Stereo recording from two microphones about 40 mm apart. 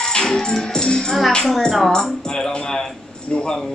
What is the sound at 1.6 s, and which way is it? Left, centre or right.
Speech, centre.